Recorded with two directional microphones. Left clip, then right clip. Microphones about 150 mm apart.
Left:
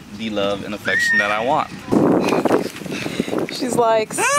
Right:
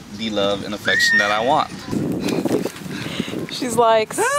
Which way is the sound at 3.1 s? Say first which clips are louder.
Left 4 dB; 5° right (ahead or behind).